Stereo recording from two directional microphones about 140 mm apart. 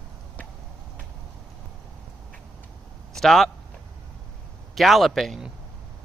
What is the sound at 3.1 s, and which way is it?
Speech, centre (ahead or behind).